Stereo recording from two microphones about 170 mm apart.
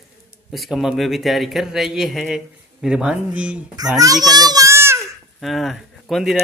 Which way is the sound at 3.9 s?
20° right (ahead or behind).